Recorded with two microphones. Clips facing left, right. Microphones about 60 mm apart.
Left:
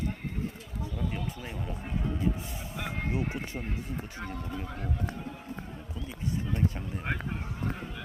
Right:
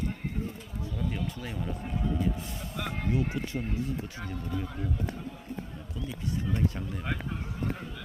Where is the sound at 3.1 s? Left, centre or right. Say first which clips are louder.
Right 5 dB; left.